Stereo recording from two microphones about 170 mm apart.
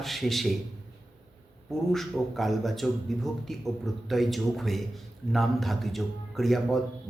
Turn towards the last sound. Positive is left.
turn(degrees=0)  # may be behind; listen again after turning